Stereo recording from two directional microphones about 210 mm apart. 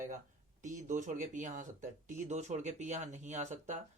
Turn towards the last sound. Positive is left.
turn(degrees=-35)  # may be behind; listen again after turning